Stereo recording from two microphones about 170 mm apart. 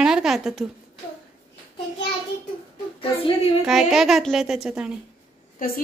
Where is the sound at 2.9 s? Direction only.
30° left (ahead or behind).